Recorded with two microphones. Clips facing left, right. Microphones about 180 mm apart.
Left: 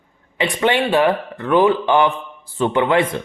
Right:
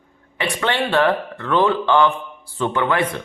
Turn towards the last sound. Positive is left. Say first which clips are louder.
# left 4 dB
turn(degrees=25)  # may be behind; listen again after turning